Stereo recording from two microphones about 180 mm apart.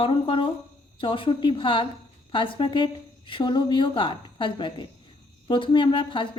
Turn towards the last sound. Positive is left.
turn(degrees=25)  # may be behind; listen again after turning